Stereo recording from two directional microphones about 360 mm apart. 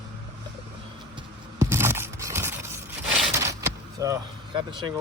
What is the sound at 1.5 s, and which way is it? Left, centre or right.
Scrape, centre.